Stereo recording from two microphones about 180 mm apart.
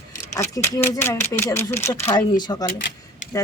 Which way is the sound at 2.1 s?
25° left (ahead or behind).